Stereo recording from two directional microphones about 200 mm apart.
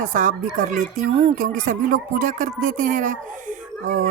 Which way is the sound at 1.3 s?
45° right (ahead or behind).